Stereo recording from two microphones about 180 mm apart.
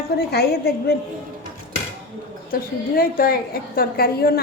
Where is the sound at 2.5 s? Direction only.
55° left (ahead or behind).